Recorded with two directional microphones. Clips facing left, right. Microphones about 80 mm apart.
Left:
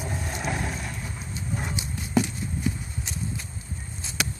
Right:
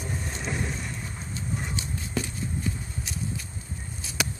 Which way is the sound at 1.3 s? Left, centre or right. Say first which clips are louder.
Left 1 dB; centre.